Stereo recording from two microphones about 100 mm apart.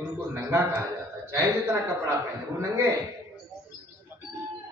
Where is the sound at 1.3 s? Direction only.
25° right (ahead or behind).